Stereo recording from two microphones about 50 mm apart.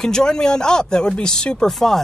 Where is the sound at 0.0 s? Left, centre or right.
Centre.